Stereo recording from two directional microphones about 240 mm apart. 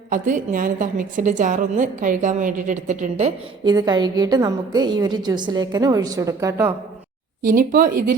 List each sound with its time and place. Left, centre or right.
0.1 s a woman's voice: right; by 6.7 s centre
7.4 s speech: right